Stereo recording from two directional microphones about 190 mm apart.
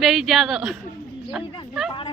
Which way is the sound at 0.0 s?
Centre (ahead or behind).